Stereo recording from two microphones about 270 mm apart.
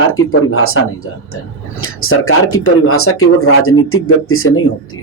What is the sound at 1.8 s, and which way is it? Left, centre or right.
Speech, left.